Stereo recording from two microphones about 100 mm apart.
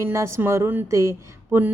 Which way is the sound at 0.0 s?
30° right (ahead or behind).